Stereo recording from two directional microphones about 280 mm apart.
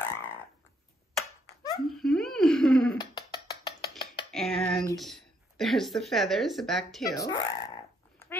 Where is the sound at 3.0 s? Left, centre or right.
Centre.